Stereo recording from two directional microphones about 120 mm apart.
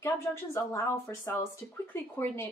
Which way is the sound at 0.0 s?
25° left (ahead or behind).